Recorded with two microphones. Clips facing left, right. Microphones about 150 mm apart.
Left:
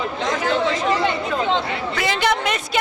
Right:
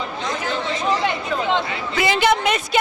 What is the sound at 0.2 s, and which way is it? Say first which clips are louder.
Chatter: left 6 dB; 90° left.